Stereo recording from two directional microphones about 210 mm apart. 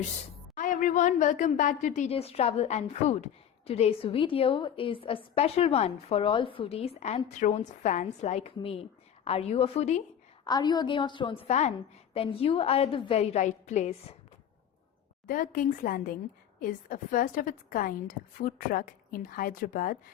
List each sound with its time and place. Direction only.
0.5 s a woman's voice: 40° left (ahead or behind)
10.4 s a woman's voice: 20° left (ahead or behind)
15.3 s a woman's voice: 40° left (ahead or behind)